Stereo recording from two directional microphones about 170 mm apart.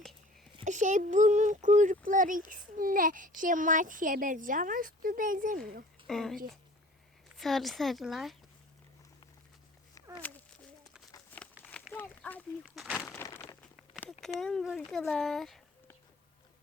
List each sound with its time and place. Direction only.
0.6 s a child's voice: 45° right (ahead or behind)
6.1 s speech: centre (ahead or behind)
10.2 s a sound: 10° left (ahead or behind)
12.6 s speech: centre (ahead or behind)
13.2 s a sound: 20° left (ahead or behind)
14.3 s speech: 5° left (ahead or behind)